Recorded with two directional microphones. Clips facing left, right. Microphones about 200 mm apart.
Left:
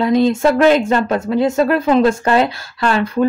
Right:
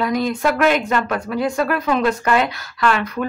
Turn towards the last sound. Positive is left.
turn(degrees=25)  # may be behind; listen again after turning